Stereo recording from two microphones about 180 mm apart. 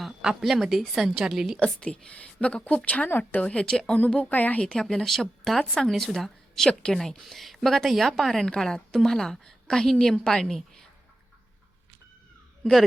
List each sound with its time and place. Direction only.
0.0 s a woman's voice: 5° right (ahead or behind)